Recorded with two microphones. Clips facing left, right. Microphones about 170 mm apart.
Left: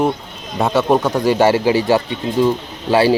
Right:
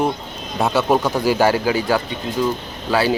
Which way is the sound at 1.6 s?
30° left (ahead or behind).